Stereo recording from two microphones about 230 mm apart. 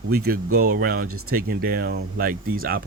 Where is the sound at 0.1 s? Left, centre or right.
Right.